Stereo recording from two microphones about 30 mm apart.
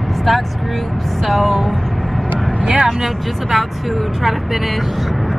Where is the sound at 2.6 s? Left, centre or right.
Right.